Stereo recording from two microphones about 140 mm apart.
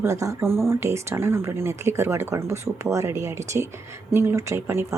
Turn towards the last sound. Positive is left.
turn(degrees=-20)  # may be behind; listen again after turning